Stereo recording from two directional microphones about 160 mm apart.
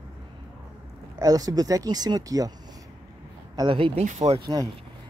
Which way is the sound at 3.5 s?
30° right (ahead or behind).